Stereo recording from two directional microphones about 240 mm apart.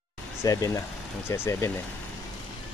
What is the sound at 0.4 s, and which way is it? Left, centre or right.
Speech, centre.